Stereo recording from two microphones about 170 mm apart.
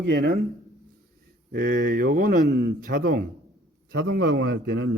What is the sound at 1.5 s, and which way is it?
A man's voice, 60° right (ahead or behind).